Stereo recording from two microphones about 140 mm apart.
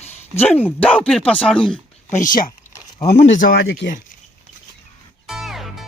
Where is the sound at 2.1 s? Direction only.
70° left (ahead or behind).